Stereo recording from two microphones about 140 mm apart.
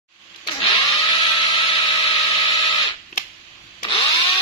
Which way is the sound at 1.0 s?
35° left (ahead or behind).